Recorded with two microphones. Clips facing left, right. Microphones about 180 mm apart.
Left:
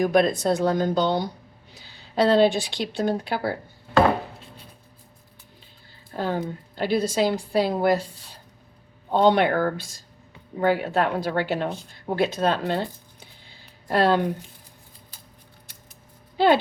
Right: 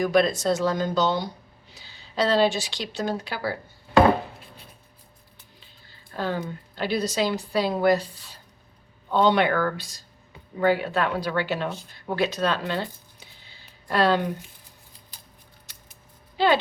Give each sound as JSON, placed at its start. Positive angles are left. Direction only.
{"t": 0.0, "sound": "a woman's voice", "side_deg": 50}
{"t": 6.1, "sound": "a woman's voice", "side_deg": 45}